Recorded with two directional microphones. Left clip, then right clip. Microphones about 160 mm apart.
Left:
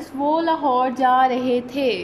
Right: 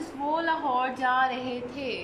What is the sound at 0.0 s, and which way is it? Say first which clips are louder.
A woman's voice: left 8 dB; 30° left (ahead or behind).